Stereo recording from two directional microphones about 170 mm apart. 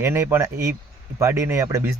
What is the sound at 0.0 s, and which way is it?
Speech, 15° right (ahead or behind).